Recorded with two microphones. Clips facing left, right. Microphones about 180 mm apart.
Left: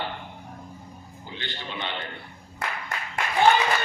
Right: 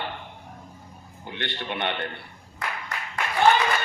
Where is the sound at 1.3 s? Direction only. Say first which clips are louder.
Right 5 dB; 65° right (ahead or behind).